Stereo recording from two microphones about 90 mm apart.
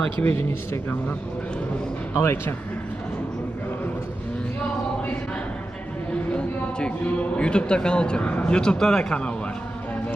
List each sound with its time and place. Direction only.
0.0 s speech: 15° left (ahead or behind)
2.1 s speech: 25° left (ahead or behind)
6.3 s speech: 10° left (ahead or behind)